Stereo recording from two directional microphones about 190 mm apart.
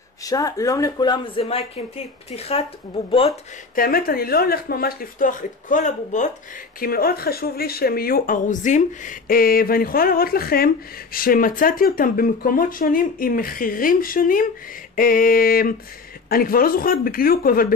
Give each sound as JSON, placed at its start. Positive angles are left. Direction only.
{"t": 0.2, "sound": "speech", "side_deg": 20}
{"t": 3.7, "sound": "speech", "side_deg": 50}
{"t": 6.8, "sound": "speech", "side_deg": 50}